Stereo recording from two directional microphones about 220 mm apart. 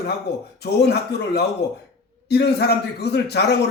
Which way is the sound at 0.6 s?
50° left (ahead or behind).